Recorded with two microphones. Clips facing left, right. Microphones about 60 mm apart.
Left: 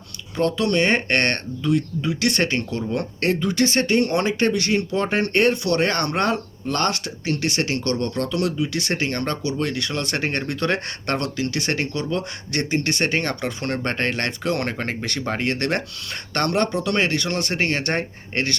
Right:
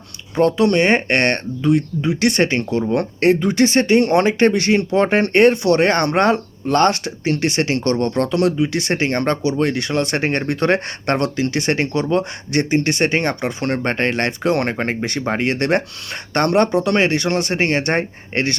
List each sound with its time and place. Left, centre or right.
0.3 s speech: right